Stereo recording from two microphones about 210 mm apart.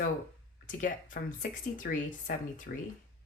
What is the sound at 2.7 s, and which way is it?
Speech, 50° left (ahead or behind).